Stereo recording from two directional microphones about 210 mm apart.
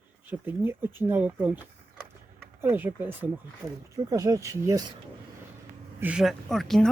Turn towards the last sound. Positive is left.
turn(degrees=0)  # may be behind; listen again after turning